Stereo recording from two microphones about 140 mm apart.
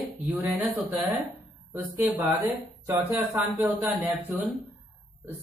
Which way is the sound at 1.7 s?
15° right (ahead or behind).